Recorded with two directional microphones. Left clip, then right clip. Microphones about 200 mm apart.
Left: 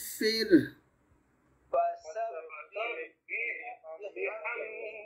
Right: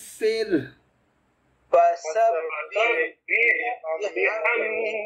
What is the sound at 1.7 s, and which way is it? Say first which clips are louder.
Speech: right 12 dB; 50° right (ahead or behind).